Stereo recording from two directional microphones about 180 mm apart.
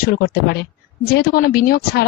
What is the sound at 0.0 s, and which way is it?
Speech, 55° left (ahead or behind).